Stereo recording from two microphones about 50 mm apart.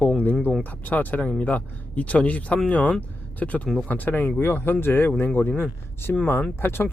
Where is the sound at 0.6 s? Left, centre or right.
Left.